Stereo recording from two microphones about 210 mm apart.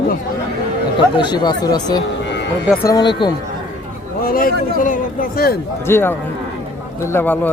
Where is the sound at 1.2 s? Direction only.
20° left (ahead or behind).